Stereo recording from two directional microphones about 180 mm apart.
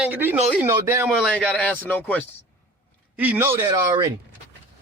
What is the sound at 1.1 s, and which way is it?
Speech, centre (ahead or behind).